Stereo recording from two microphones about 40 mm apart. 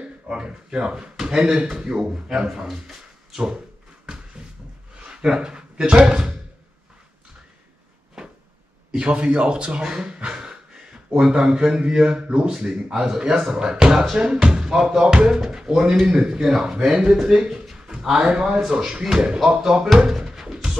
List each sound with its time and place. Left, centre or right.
0.3 s speech: right
5.0 s speech: right
8.9 s speech: right
12.5 s speech: centre
17.7 s a sound: centre
18.1 s speech: right
18.6 s speech: centre
18.9 s speech: right
20.1 s music: centre